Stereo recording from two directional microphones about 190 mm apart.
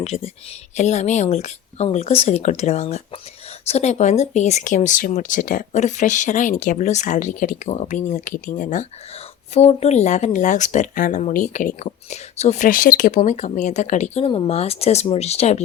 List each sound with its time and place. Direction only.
0.0 s speech: 35° left (ahead or behind)